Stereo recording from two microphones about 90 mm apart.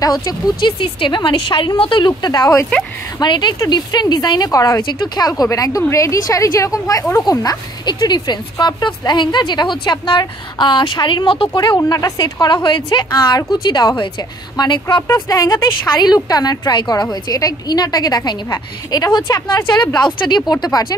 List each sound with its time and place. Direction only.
0.0 s a woman's voice: 45° left (ahead or behind)
4.9 s a woman's voice: 50° left (ahead or behind)
5.4 s a woman's voice: 40° left (ahead or behind)
7.2 s speech: 50° left (ahead or behind)
11.7 s a woman's voice: 40° left (ahead or behind)
12.6 s speech: 60° left (ahead or behind)
13.1 s a woman's voice: 45° left (ahead or behind)
15.2 s a woman's voice: 45° left (ahead or behind)
20.2 s a woman's voice: 55° left (ahead or behind)